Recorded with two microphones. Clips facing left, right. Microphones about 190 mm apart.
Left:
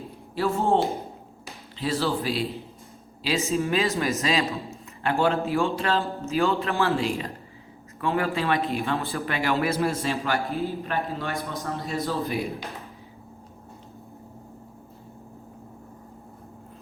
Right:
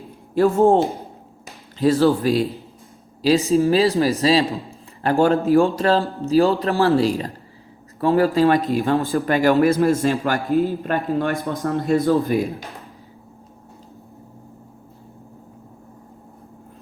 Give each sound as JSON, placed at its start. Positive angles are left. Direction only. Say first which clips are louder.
{"t": 0.4, "sound": "a man's voice", "louder": "right 9 dB", "side_deg": -50}
{"t": 1.8, "sound": "a man's voice", "louder": "right 10 dB", "side_deg": -45}